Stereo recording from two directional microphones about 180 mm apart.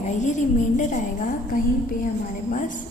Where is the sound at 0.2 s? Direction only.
40° left (ahead or behind).